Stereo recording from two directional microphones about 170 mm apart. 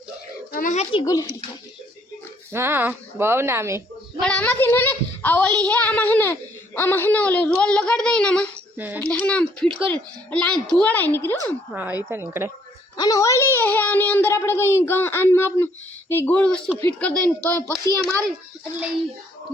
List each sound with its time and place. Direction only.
0.5 s speech: 50° left (ahead or behind)
1.0 s a child's voice: 20° left (ahead or behind)
2.5 s speech: 15° right (ahead or behind)
4.2 s a child's voice: 10° left (ahead or behind)
11.7 s speech: 10° right (ahead or behind)
13.0 s a child's voice: 20° left (ahead or behind); by 18.3 s 5° left (ahead or behind)